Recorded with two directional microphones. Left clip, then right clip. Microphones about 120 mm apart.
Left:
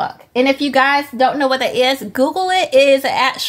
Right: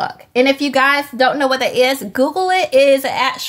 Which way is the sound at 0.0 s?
5° left (ahead or behind).